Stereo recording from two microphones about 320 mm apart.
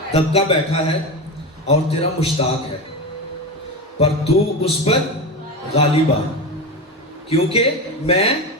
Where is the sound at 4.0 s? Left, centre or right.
Centre.